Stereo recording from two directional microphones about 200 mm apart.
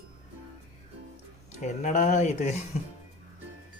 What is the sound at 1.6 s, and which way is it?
Speech, 35° left (ahead or behind).